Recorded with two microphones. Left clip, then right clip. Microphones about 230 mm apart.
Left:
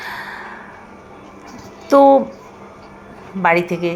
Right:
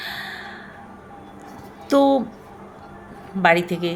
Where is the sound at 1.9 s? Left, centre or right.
Centre.